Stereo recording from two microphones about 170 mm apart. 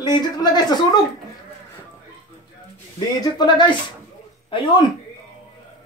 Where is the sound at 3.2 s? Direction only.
25° left (ahead or behind).